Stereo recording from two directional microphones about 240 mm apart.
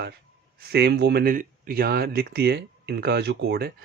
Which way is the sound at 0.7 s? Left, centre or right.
Right.